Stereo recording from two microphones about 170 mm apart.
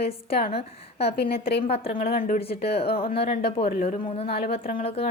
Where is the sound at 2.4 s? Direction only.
35° left (ahead or behind).